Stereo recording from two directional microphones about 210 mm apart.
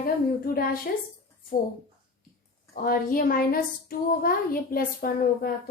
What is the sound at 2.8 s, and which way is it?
A woman's voice, 45° left (ahead or behind).